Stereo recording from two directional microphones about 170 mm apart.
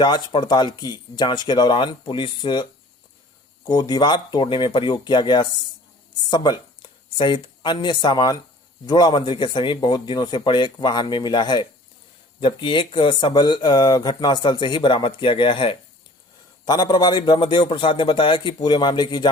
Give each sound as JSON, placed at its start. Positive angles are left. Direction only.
{"t": 0.0, "sound": "speech", "side_deg": 25}
{"t": 3.7, "sound": "speech", "side_deg": 25}